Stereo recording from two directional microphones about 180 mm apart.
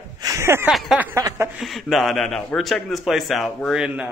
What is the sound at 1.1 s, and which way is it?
Speech, 15° right (ahead or behind).